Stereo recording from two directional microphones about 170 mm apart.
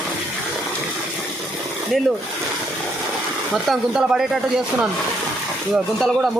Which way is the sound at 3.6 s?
5° right (ahead or behind).